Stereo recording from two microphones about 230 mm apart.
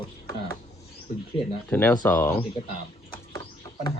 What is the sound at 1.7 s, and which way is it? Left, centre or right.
Speech, centre.